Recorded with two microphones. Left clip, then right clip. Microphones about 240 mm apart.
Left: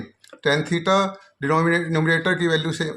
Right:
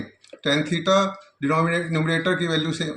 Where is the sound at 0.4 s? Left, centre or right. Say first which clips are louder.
Left 1 dB; left.